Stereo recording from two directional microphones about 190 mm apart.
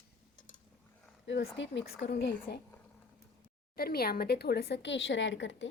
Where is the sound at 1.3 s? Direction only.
70° left (ahead or behind).